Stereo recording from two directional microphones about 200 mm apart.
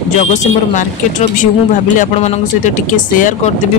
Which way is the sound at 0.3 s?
40° left (ahead or behind).